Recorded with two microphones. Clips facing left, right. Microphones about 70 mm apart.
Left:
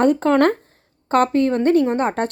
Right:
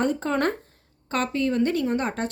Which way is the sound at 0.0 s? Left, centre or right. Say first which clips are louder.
Left 9 dB; left.